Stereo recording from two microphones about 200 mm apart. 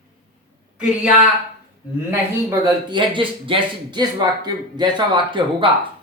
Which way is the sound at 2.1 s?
20° right (ahead or behind).